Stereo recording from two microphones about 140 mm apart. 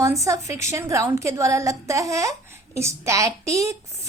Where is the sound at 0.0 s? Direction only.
20° right (ahead or behind).